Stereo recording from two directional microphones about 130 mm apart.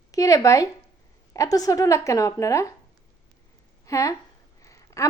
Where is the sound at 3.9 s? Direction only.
25° left (ahead or behind).